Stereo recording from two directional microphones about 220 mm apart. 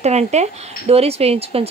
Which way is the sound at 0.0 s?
30° right (ahead or behind).